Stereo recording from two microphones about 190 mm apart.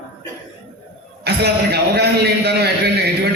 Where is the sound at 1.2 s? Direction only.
60° right (ahead or behind).